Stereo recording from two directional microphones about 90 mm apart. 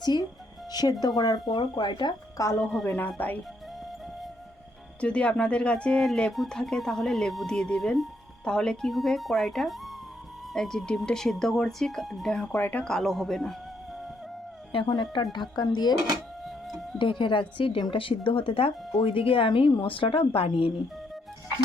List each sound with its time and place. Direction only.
0.0 s speech: 50° left (ahead or behind)
2.6 s speech: centre (ahead or behind)
2.8 s speech: 20° left (ahead or behind)
4.9 s speech: 15° left (ahead or behind)
12.5 s speech: 20° left (ahead or behind)
12.8 s speech: 5° left (ahead or behind)
14.7 s speech: 70° left (ahead or behind)
15.1 s speech: 55° left (ahead or behind)
16.4 s music: centre (ahead or behind)
17.0 s a woman's voice: 65° left (ahead or behind); by 20.7 s 85° left